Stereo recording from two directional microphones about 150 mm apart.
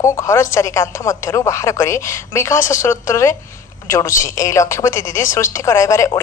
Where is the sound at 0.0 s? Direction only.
20° left (ahead or behind).